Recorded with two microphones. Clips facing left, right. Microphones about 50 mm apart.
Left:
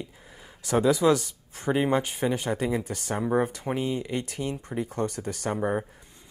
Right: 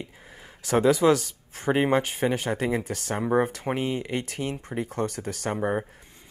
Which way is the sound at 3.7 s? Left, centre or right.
Right.